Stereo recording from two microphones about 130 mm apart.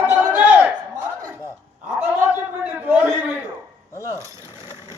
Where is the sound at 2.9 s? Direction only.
10° right (ahead or behind).